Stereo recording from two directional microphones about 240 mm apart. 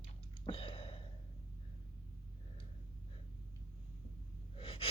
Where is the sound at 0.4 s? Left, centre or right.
Left.